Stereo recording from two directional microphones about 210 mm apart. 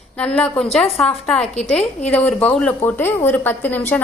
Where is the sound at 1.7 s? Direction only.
5° left (ahead or behind).